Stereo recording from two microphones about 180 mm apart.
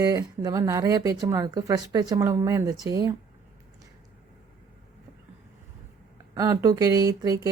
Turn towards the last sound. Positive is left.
turn(degrees=-20)  # may be behind; listen again after turning